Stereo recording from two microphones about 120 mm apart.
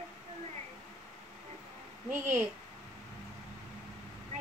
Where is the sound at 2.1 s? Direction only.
15° right (ahead or behind).